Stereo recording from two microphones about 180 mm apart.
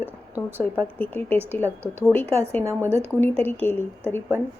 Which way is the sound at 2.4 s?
10° left (ahead or behind).